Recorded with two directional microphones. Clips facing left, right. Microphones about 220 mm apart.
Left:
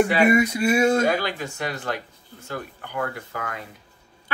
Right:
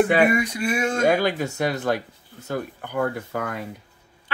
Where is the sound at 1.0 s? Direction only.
50° right (ahead or behind).